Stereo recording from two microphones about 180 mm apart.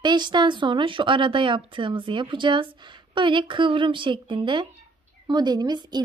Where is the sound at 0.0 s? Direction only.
25° right (ahead or behind).